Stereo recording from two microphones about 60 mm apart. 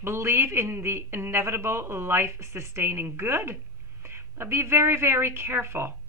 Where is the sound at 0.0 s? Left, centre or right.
Right.